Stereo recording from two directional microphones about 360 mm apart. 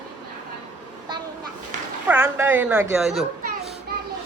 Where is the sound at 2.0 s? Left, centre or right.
Centre.